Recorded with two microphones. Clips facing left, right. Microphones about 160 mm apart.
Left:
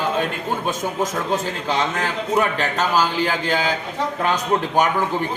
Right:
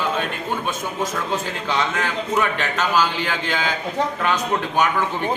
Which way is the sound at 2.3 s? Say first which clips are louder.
Left 2 dB; 35° left (ahead or behind).